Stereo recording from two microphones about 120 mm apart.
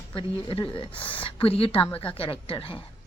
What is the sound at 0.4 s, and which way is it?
A woman's voice, 50° left (ahead or behind).